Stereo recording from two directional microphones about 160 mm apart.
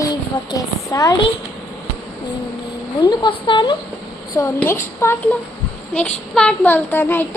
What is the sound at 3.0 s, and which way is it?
Speech, 30° left (ahead or behind).